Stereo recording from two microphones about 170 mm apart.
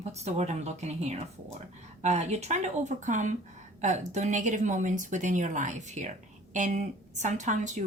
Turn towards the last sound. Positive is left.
turn(degrees=-45)  # may be behind; listen again after turning